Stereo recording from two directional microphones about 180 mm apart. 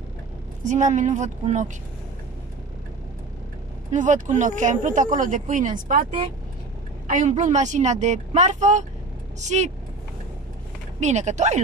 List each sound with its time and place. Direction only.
0.7 s speech: 45° right (ahead or behind)
3.9 s speech: 45° right (ahead or behind)
7.1 s a woman's voice: 45° right (ahead or behind)
11.0 s a woman's voice: 40° right (ahead or behind)